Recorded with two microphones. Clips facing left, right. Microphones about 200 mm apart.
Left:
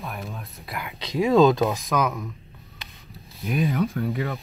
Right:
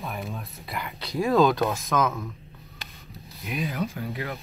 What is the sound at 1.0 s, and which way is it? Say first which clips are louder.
Speech: left 3 dB; 20° left (ahead or behind).